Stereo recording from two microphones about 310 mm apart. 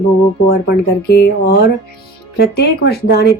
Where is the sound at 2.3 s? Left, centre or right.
Left.